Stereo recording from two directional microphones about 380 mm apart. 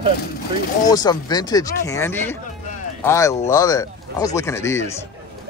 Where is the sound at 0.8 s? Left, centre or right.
Centre.